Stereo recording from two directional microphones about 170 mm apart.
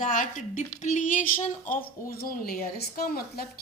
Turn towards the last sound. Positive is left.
turn(degrees=65)  # may be behind; listen again after turning